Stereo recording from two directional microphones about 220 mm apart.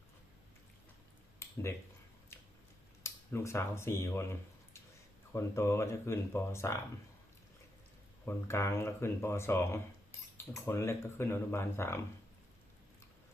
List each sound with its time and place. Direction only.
1.4 s a sound: 10° left (ahead or behind)
3.0 s speech: 10° left (ahead or behind)
8.2 s speech: 10° left (ahead or behind)